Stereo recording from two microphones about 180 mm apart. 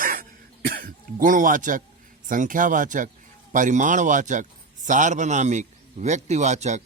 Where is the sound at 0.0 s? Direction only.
50° right (ahead or behind).